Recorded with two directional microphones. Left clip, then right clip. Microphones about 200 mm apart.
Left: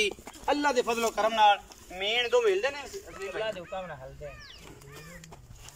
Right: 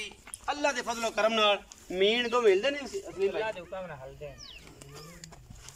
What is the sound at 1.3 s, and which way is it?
Speech, 20° right (ahead or behind).